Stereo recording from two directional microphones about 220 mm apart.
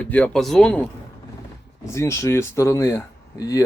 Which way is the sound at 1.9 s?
15° left (ahead or behind).